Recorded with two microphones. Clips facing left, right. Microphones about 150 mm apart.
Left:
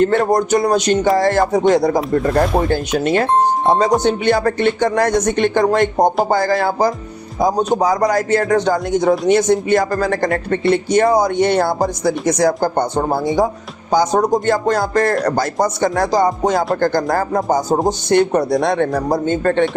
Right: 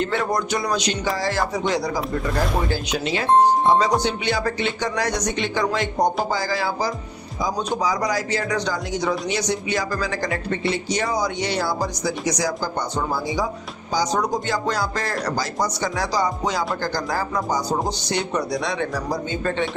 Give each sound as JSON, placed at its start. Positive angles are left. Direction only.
{"t": 0.0, "sound": "speech", "side_deg": 50}